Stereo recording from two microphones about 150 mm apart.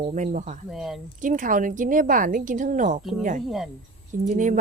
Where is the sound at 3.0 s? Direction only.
Centre (ahead or behind).